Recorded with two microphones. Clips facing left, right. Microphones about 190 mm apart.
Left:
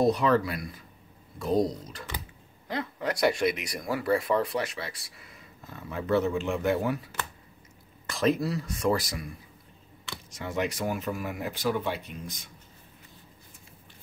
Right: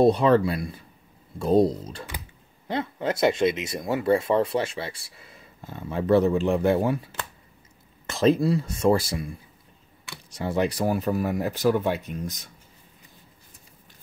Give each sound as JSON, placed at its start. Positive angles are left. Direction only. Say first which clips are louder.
{"t": 0.0, "sound": "speech", "louder": "right 5 dB", "side_deg": -30}
{"t": 8.1, "sound": "speech", "louder": "right 6 dB", "side_deg": -25}
{"t": 10.3, "sound": "speech", "louder": "right 6 dB", "side_deg": -35}